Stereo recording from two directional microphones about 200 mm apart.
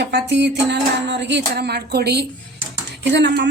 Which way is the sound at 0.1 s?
60° right (ahead or behind).